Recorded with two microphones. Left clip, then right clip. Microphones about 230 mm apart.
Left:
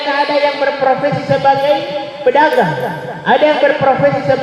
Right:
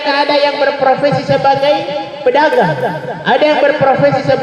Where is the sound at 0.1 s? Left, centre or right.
Right.